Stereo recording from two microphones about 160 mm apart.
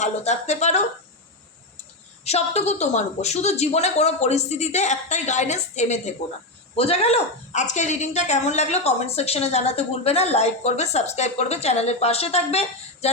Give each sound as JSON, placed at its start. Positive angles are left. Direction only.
{"t": 0.0, "sound": "speech", "side_deg": 45}
{"t": 2.2, "sound": "speech", "side_deg": 40}